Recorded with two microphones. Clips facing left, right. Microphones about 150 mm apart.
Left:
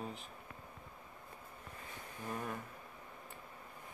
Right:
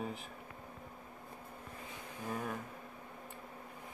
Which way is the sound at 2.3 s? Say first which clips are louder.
Right 2 dB; centre (ahead or behind).